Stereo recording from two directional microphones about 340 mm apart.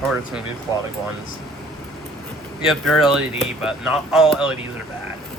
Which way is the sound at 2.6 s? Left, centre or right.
Centre.